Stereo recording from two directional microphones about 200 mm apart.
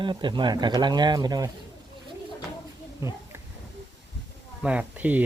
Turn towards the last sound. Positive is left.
turn(degrees=-10)  # may be behind; listen again after turning